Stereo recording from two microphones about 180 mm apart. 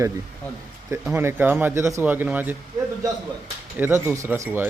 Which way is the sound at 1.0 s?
10° right (ahead or behind).